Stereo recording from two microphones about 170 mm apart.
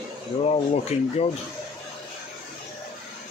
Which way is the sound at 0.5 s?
40° left (ahead or behind).